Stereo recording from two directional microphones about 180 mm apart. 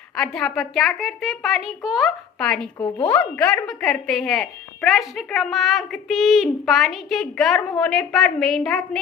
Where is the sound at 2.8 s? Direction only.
25° left (ahead or behind).